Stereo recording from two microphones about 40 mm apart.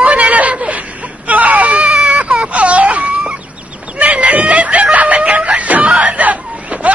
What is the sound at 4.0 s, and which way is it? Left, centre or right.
Snicker, right.